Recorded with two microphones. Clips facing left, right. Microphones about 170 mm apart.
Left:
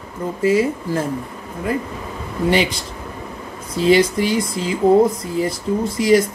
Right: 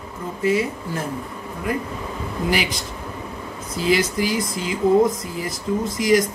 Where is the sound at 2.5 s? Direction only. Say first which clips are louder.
Left 6 dB; 30° left (ahead or behind).